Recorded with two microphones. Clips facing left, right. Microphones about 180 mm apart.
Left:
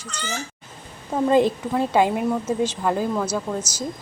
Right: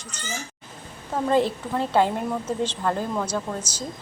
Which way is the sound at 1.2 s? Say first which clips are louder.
Left 4 dB; 15° left (ahead or behind).